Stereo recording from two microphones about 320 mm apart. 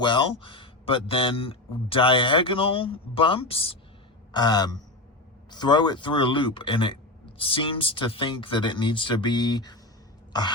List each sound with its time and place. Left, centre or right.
0.0 s speech: centre